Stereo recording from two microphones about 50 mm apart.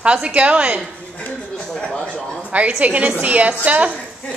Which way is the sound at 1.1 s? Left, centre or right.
Left.